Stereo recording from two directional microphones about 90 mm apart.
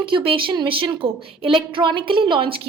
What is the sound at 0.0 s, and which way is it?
A woman's voice, 80° right.